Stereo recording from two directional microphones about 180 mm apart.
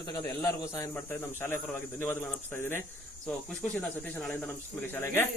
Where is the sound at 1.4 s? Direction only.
15° left (ahead or behind).